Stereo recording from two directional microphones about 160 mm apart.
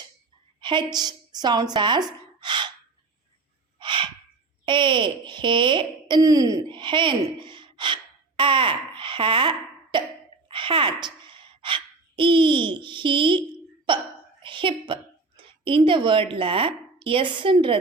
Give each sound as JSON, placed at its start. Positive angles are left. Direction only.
{"t": 0.6, "sound": "speech", "side_deg": -30}
{"t": 3.8, "sound": "gasp", "side_deg": -30}
{"t": 4.6, "sound": "a child's voice", "side_deg": -30}